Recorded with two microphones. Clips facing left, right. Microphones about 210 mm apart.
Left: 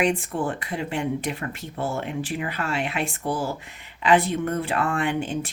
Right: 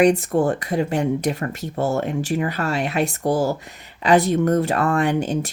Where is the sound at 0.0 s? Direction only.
40° right (ahead or behind).